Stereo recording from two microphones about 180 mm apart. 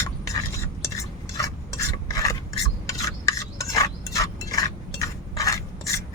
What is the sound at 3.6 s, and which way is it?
Stir, 20° left (ahead or behind).